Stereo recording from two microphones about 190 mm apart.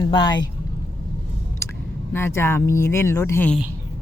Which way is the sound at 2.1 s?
10° left (ahead or behind).